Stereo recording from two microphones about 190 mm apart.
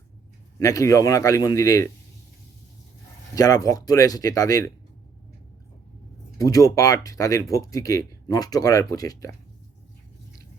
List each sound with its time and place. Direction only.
0.6 s speech: 15° left (ahead or behind)
3.3 s speech: 20° left (ahead or behind)
6.4 s speech: 20° left (ahead or behind)